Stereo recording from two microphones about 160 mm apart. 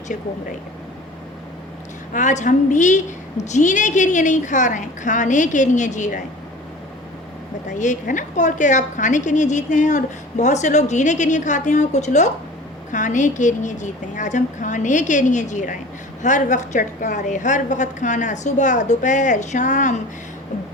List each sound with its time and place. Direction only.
2.1 s a woman's voice: 50° left (ahead or behind)
7.7 s a woman's voice: 50° left (ahead or behind)